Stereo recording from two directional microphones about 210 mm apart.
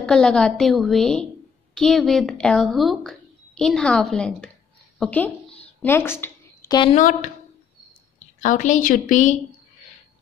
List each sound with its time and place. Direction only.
0.0 s a woman's voice: 5° left (ahead or behind)
5.8 s a sound: 10° left (ahead or behind)
6.8 s a woman's voice: 35° left (ahead or behind)
8.4 s a woman's voice: 35° left (ahead or behind)